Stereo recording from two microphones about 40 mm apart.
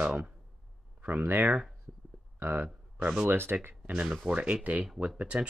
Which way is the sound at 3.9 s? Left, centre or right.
Right.